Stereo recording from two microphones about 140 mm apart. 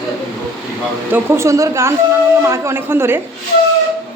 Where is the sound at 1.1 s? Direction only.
20° right (ahead or behind).